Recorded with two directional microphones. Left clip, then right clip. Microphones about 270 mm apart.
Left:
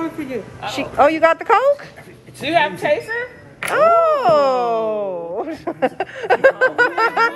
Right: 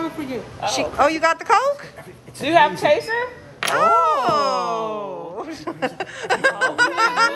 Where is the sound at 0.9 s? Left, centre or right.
Centre.